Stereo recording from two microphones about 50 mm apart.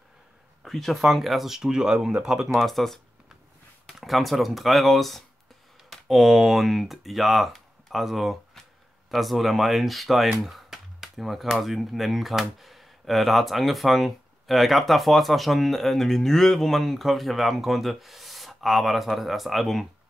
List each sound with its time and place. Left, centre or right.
0.7 s speech: centre
2.5 s speech: centre